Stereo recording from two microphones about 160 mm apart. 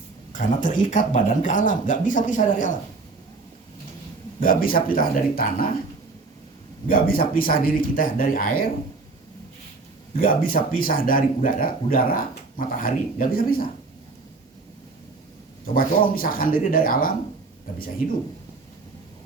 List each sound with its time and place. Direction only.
0.3 s speech: 55° left (ahead or behind)
4.4 s speech: 60° left (ahead or behind)
6.8 s speech: 65° left (ahead or behind)
10.2 s speech: 60° left (ahead or behind)
15.6 s speech: 65° left (ahead or behind)